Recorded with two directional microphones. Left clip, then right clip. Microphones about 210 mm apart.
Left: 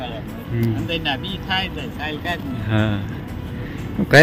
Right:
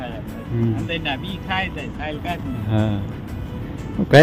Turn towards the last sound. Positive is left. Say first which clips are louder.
# even
turn(degrees=0)  # may be behind; listen again after turning